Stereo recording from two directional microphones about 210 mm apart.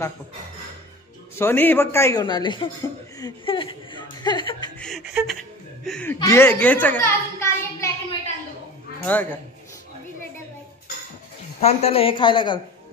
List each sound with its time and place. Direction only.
1.3 s a man's voice: 10° left (ahead or behind)
4.7 s chuckle: centre (ahead or behind)
5.9 s a child's voice: 5° left (ahead or behind)
9.0 s a man's voice: 10° left (ahead or behind)
11.6 s a woman's voice: 30° left (ahead or behind)